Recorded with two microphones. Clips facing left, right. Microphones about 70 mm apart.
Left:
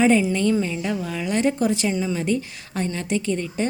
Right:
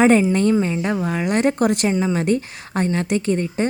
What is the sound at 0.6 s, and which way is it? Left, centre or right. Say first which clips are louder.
A woman's voice: right 4 dB; right.